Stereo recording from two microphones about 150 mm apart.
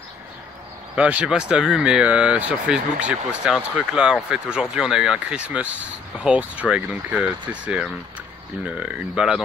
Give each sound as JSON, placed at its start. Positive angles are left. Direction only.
{"t": 0.9, "sound": "speech", "side_deg": -10}